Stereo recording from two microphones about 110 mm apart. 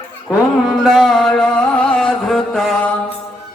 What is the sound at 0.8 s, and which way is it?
Music, centre (ahead or behind).